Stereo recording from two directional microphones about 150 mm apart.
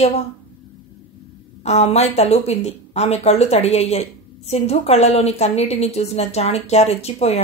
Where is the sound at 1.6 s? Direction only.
45° left (ahead or behind).